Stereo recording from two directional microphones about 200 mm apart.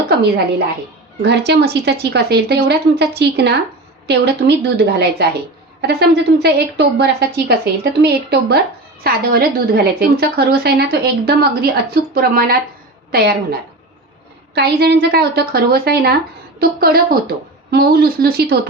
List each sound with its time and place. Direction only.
1.2 s a woman's voice: 55° right (ahead or behind)